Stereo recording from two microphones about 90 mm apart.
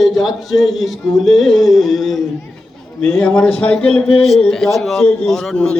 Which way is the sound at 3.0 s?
20° left (ahead or behind).